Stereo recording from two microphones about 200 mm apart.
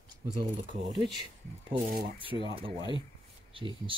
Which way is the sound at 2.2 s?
25° right (ahead or behind).